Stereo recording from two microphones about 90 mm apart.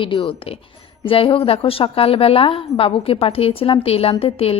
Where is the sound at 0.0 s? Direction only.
75° left (ahead or behind).